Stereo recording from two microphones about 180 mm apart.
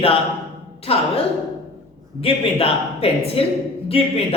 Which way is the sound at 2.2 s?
30° left (ahead or behind).